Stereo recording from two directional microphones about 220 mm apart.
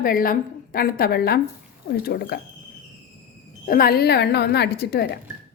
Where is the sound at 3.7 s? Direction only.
40° left (ahead or behind).